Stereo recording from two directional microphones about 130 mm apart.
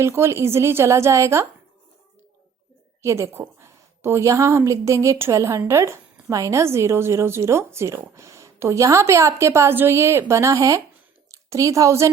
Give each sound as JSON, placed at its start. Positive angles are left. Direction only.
{"t": 0.0, "sound": "a woman's voice", "side_deg": -20}
{"t": 3.0, "sound": "a woman's voice", "side_deg": -20}